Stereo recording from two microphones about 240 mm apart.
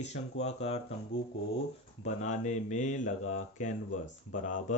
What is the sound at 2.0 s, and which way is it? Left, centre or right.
Speech, left.